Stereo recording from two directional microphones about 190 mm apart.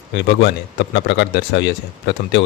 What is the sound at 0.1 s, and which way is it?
A man's voice, 65° left (ahead or behind).